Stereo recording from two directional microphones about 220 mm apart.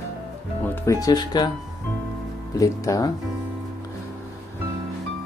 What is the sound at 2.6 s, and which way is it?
Speech, 15° left (ahead or behind).